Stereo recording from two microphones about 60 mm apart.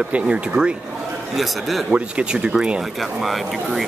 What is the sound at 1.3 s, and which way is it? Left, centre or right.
Speech, centre.